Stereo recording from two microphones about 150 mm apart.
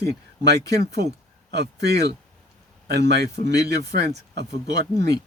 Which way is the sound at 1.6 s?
90° right.